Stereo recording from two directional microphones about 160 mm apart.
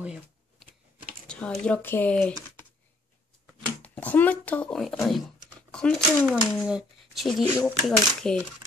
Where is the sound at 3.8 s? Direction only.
10° left (ahead or behind).